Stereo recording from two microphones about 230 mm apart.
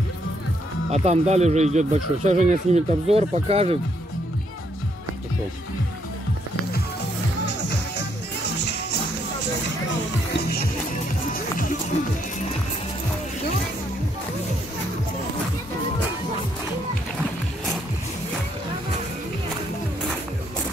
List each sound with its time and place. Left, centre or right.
0.9 s speech: right